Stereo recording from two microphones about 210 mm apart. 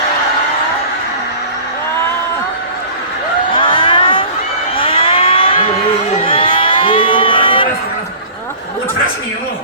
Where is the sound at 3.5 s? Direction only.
25° left (ahead or behind).